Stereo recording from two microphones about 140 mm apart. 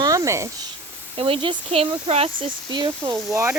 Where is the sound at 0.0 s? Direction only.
25° right (ahead or behind).